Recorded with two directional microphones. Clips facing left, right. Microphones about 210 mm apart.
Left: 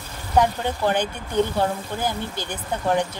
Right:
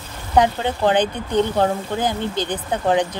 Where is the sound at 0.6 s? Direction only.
20° right (ahead or behind).